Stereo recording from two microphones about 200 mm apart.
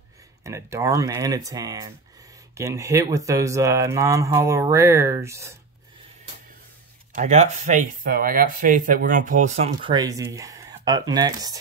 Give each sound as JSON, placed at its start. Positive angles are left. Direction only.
{"t": 0.4, "sound": "speech", "side_deg": -15}
{"t": 7.2, "sound": "speech", "side_deg": -35}
{"t": 9.9, "sound": "speech", "side_deg": -15}